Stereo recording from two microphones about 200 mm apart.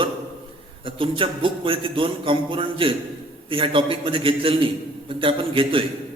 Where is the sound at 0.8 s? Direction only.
25° right (ahead or behind).